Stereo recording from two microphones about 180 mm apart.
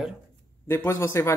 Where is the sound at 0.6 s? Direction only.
15° left (ahead or behind).